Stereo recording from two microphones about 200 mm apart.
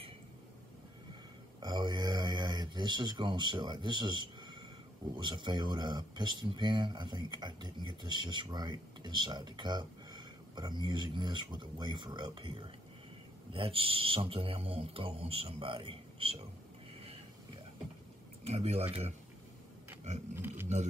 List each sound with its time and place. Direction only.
1.6 s speech: 20° right (ahead or behind)
18.4 s speech: 30° right (ahead or behind)
20.3 s speech: 10° right (ahead or behind)
20.6 s speech: 35° right (ahead or behind)